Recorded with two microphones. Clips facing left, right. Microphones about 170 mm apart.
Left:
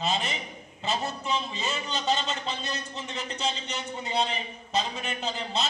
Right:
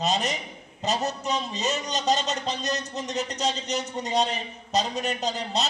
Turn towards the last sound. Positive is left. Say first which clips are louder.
# right 3 dB
turn(degrees=-40)  # may be behind; listen again after turning